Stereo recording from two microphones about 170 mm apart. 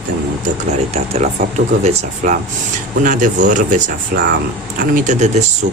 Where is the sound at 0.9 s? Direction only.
45° right (ahead or behind).